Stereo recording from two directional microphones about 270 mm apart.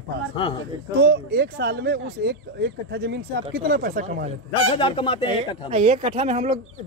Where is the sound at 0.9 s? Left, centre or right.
Right.